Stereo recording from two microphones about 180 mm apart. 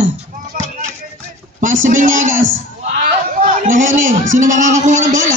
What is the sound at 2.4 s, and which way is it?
A man's voice, 80° right.